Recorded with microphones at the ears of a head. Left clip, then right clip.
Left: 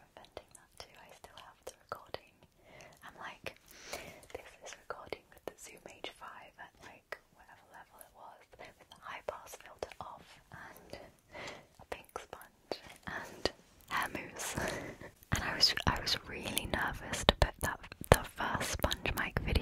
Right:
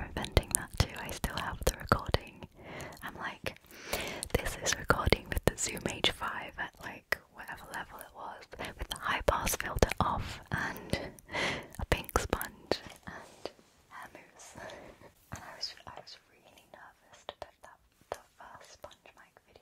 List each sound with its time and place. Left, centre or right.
0.0 s whispering: right
13.2 s whispering: left